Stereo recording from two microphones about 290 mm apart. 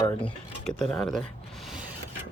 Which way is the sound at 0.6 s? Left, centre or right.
Centre.